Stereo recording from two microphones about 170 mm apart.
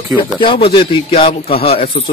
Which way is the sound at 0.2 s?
30° left (ahead or behind).